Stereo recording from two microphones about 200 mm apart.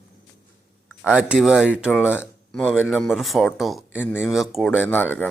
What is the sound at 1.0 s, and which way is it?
Speech, 5° right (ahead or behind).